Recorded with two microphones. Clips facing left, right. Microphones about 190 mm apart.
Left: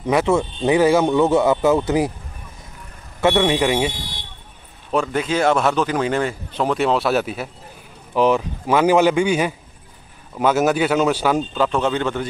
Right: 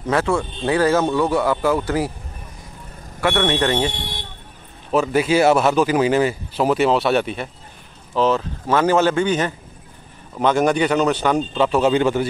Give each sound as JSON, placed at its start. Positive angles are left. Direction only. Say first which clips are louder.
{"t": 0.1, "sound": "speech", "louder": "left 2 dB", "side_deg": 20}
{"t": 3.2, "sound": "a man's voice", "louder": "left 2 dB", "side_deg": 20}
{"t": 3.9, "sound": "vehicle", "louder": "right 3 dB", "side_deg": -60}
{"t": 4.9, "sound": "speech", "louder": "right 3 dB", "side_deg": -5}
{"t": 8.1, "sound": "a man's voice", "louder": "left 1 dB", "side_deg": 15}